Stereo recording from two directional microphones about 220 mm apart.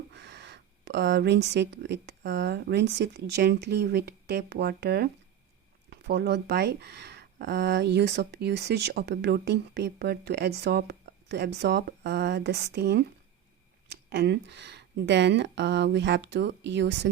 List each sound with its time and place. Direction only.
0.1 s speech: 50° right (ahead or behind)